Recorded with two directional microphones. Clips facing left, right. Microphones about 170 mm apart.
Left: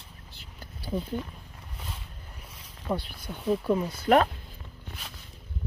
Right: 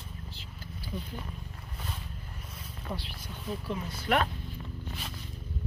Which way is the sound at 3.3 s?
55° left (ahead or behind).